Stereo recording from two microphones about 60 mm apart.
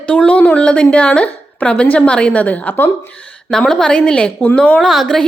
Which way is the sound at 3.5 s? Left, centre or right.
Centre.